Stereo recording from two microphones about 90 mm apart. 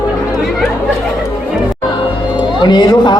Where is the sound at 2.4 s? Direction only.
55° left (ahead or behind).